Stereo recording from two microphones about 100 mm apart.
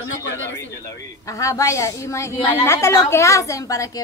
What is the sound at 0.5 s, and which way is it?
A woman's voice, 30° left (ahead or behind).